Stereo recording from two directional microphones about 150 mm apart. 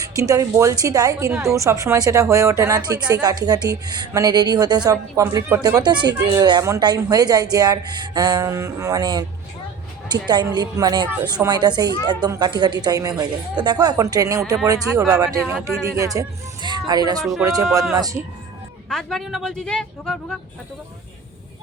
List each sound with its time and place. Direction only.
0.2 s a woman's voice: 20° right (ahead or behind)
18.9 s speech: 5° left (ahead or behind)